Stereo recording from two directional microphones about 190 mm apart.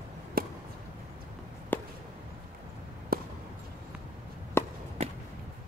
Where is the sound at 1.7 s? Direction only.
10° left (ahead or behind).